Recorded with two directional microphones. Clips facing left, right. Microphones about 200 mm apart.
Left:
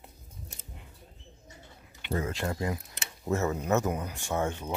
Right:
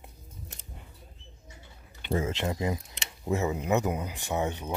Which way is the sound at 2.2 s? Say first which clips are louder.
Right 1 dB; 25° right (ahead or behind).